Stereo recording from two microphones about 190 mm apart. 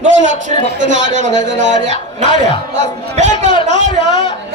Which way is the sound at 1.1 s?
40° right (ahead or behind).